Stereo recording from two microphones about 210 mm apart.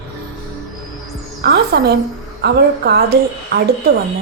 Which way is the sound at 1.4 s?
50° right (ahead or behind).